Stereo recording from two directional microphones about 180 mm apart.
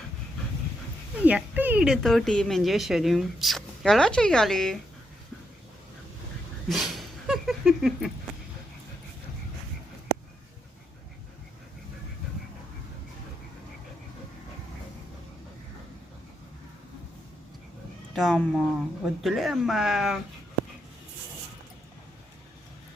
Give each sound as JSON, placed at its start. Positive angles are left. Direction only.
{"t": 1.2, "sound": "speech", "side_deg": -10}
{"t": 6.7, "sound": "a sound", "side_deg": 0}
{"t": 18.1, "sound": "speech", "side_deg": 0}